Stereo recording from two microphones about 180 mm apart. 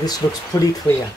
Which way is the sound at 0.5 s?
20° left (ahead or behind).